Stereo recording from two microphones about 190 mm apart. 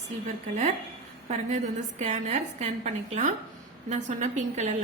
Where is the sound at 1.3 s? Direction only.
40° right (ahead or behind).